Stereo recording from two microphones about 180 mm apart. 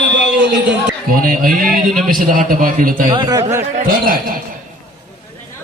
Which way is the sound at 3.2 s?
20° right (ahead or behind).